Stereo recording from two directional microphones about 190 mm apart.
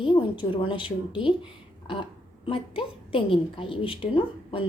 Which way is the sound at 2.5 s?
30° left (ahead or behind).